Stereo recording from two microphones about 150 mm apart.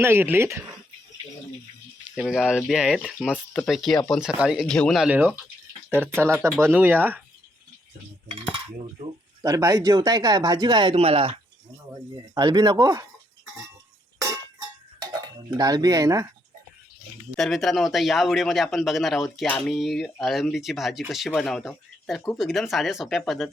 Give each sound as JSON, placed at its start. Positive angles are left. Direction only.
{"t": 0.0, "sound": "speech", "side_deg": -15}
{"t": 2.1, "sound": "a man's voice", "side_deg": 0}
{"t": 4.6, "sound": "a man's voice", "side_deg": 5}
{"t": 5.0, "sound": "speech", "side_deg": -10}
{"t": 9.4, "sound": "speech", "side_deg": -20}
{"t": 11.9, "sound": "speech", "side_deg": -20}
{"t": 14.6, "sound": "cutlery", "side_deg": -25}
{"t": 17.3, "sound": "a man's voice", "side_deg": 0}